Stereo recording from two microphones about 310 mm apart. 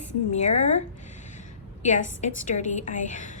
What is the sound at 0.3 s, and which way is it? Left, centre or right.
Speech, left.